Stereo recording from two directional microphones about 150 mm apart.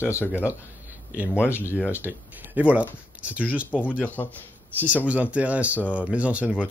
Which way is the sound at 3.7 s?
10° left (ahead or behind).